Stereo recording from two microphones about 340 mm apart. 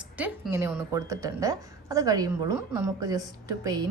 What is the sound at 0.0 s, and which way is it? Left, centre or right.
Speech, centre.